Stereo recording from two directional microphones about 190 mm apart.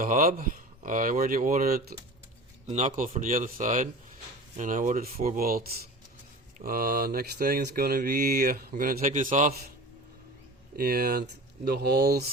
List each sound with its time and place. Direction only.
0.0 s mantra: 45° right (ahead or behind)
2.6 s speech: 35° right (ahead or behind)
3.1 s mantra: 45° right (ahead or behind)
10.8 s speech: 50° right (ahead or behind)